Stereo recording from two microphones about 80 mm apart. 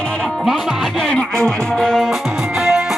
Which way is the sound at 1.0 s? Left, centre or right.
Centre.